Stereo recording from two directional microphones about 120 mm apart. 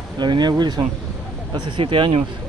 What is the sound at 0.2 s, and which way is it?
Speech, 35° right (ahead or behind).